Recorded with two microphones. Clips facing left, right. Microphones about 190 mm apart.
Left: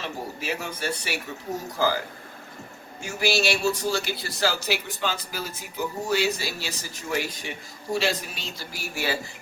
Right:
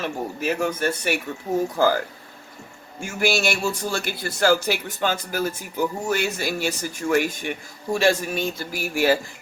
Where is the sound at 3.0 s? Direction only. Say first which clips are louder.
Right 2 dB; 50° right (ahead or behind).